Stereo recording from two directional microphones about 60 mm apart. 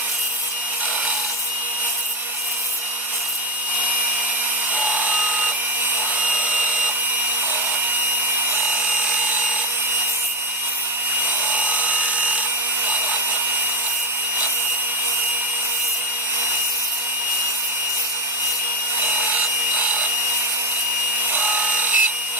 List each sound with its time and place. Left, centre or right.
4.7 s wood: right
6.1 s a sound: right
11.4 s helicopter: right
19.0 s wood: right
21.3 s wood: right